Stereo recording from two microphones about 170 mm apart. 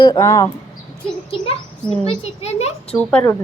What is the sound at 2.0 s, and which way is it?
Speech, 40° left (ahead or behind).